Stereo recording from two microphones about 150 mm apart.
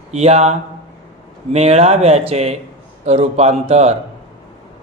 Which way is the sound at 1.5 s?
45° right (ahead or behind).